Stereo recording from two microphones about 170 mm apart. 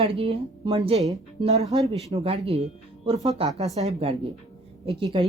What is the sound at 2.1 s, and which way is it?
A woman's voice, 35° right (ahead or behind).